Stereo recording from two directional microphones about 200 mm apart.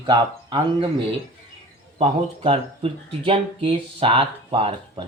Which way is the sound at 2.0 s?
30° right (ahead or behind).